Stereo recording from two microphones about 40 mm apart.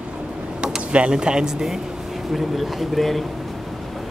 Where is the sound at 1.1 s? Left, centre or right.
Right.